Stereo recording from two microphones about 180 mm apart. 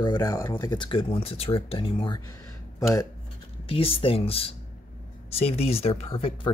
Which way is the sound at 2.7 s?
15° left (ahead or behind).